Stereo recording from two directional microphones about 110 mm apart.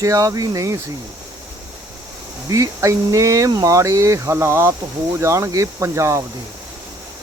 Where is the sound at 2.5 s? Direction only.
30° right (ahead or behind).